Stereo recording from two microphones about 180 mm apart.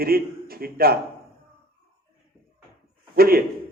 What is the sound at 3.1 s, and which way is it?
Speech, 55° right (ahead or behind).